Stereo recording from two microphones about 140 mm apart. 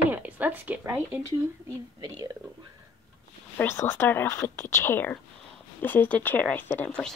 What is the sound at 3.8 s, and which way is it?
Speech, 15° left (ahead or behind).